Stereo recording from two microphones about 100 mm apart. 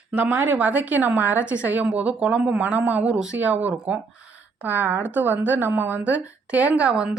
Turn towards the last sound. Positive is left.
turn(degrees=-10)  # may be behind; listen again after turning